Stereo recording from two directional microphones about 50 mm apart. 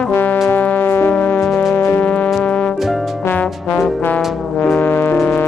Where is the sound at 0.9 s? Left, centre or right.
Left.